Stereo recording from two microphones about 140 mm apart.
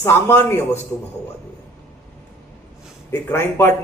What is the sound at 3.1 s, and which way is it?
Speech, 20° left (ahead or behind).